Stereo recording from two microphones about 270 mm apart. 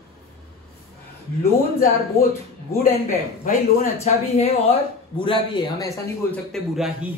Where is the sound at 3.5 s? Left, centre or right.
Left.